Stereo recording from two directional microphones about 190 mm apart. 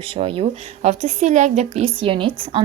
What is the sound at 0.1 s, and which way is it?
A woman's voice, 30° right (ahead or behind).